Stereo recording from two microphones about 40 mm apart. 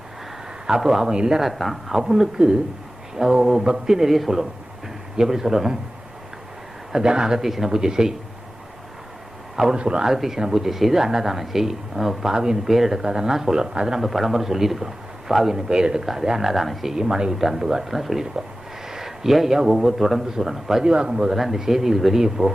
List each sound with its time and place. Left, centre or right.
0.7 s speech: centre
1.1 s speech: centre
1.4 s speech: centre
1.9 s speech: centre
6.9 s speech: centre
9.7 s speech: right
10.1 s speech: centre
14.0 s speech: centre
16.9 s speech: centre
17.3 s speech: centre
20.8 s speech: right
21.3 s speech: centre